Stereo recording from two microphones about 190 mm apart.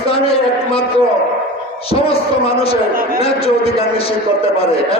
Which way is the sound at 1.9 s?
30° left (ahead or behind).